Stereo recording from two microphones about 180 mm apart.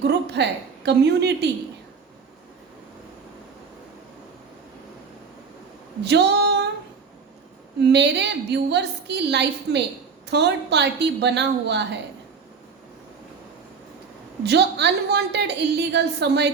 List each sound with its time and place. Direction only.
0.0 s a sound: 70° right (ahead or behind)
0.9 s a woman's voice: 70° right (ahead or behind)
6.0 s female singing: 70° right (ahead or behind)
7.8 s a woman's voice: 70° right (ahead or behind)
14.4 s a woman's voice: 70° right (ahead or behind)